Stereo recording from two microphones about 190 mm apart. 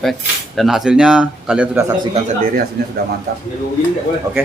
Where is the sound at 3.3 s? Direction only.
55° right (ahead or behind).